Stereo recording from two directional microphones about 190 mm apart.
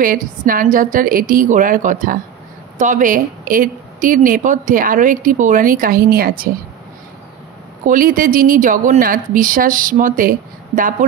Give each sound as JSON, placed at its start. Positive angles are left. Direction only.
{"t": 0.0, "sound": "speech", "side_deg": -50}
{"t": 7.8, "sound": "speech", "side_deg": -45}